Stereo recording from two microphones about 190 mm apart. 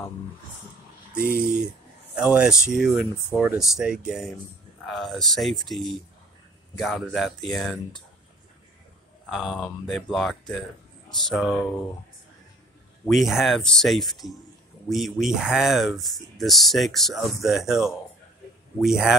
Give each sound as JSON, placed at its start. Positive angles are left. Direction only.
{"t": 1.2, "sound": "speech", "side_deg": -50}
{"t": 2.1, "sound": "speech", "side_deg": -5}
{"t": 9.3, "sound": "speech", "side_deg": 0}
{"t": 13.1, "sound": "speech", "side_deg": 0}